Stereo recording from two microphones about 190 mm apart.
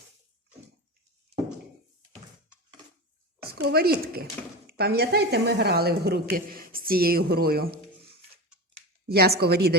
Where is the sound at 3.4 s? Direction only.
55° right (ahead or behind).